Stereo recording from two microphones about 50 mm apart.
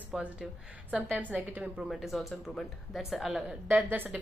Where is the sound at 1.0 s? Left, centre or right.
Right.